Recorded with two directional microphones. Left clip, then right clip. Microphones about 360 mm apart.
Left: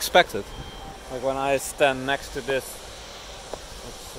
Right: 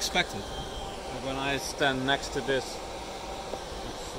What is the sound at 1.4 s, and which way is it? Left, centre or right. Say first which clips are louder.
Speech: left 6 dB; centre.